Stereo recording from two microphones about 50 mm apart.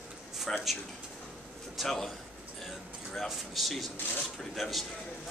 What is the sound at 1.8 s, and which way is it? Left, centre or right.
Speech, centre.